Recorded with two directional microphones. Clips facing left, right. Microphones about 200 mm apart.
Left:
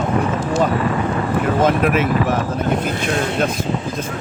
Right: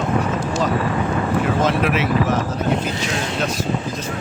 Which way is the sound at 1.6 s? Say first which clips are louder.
Left 3 dB; 50° left (ahead or behind).